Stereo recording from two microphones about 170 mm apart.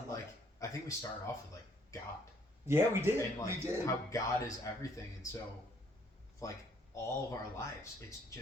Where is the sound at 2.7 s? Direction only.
15° right (ahead or behind).